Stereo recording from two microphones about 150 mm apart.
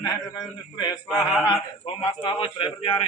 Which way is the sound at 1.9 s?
35° left (ahead or behind).